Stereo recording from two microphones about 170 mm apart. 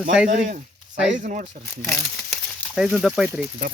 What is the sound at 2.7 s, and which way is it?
Speech, centre (ahead or behind).